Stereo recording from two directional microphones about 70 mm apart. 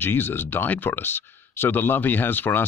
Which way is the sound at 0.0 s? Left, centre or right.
Left.